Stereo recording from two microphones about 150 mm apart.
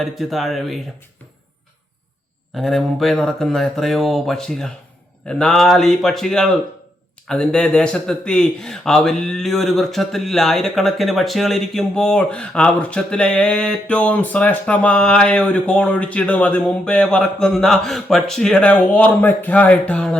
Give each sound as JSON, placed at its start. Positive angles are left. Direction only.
{"t": 0.0, "sound": "speech", "side_deg": 0}
{"t": 2.6, "sound": "speech", "side_deg": 0}